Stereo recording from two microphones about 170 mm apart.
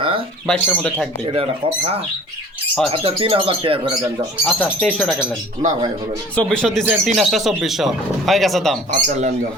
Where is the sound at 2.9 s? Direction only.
35° right (ahead or behind).